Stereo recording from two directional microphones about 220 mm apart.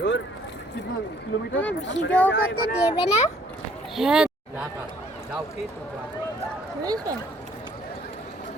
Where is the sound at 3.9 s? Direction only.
Centre (ahead or behind).